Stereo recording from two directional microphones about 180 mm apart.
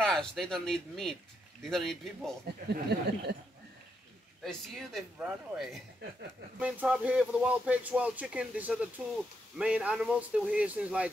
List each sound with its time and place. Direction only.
0.0 s speech: 5° left (ahead or behind)
2.7 s a sound: 65° right (ahead or behind)
4.4 s speech: centre (ahead or behind)